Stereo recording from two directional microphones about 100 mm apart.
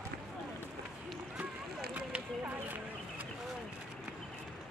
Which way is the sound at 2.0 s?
15° right (ahead or behind).